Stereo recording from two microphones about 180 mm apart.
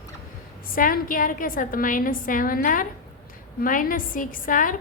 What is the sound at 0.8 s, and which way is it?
A woman's voice, 50° left (ahead or behind).